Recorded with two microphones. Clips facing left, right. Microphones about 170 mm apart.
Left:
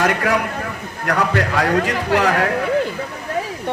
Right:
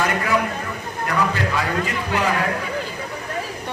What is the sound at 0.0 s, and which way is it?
A man's voice, 80° left.